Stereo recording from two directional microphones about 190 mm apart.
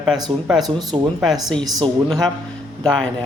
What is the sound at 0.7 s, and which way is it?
Speech, 20° right (ahead or behind).